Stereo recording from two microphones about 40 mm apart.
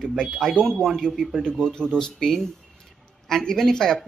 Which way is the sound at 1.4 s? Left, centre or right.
Centre.